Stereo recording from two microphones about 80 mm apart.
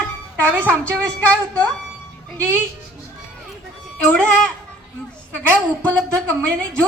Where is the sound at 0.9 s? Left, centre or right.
Centre.